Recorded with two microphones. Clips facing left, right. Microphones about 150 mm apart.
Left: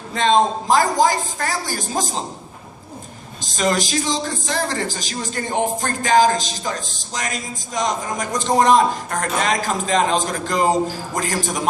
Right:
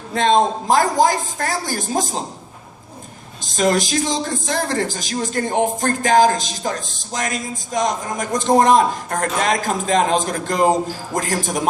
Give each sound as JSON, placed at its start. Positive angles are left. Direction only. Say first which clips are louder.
{"t": 0.1, "sound": "speech", "louder": "right 1 dB", "side_deg": -50}
{"t": 3.4, "sound": "speech", "louder": "right 3 dB", "side_deg": -50}